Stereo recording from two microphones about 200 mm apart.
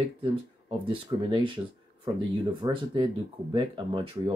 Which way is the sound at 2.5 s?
20° right (ahead or behind).